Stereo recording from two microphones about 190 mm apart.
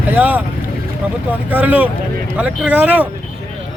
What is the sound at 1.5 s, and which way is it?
Speech, 10° right (ahead or behind).